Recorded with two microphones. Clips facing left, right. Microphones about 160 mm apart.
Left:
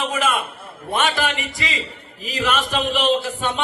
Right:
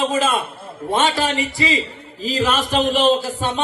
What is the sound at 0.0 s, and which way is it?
A man's voice, 30° right (ahead or behind).